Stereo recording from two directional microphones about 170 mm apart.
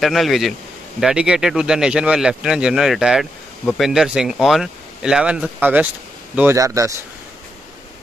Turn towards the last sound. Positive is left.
turn(degrees=-20)  # may be behind; listen again after turning